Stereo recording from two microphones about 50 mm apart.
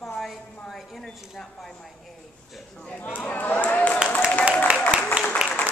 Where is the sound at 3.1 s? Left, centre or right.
Left.